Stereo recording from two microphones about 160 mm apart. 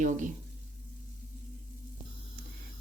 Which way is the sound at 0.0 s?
55° right (ahead or behind).